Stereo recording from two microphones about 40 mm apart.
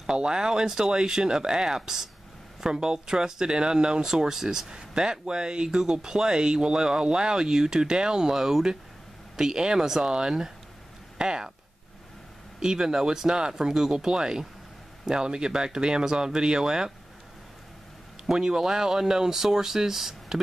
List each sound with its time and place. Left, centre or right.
0.0 s speech: centre
12.5 s speech: centre
18.2 s speech: centre